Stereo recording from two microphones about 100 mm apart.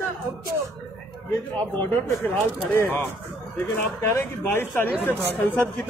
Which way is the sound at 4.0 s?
20° left (ahead or behind).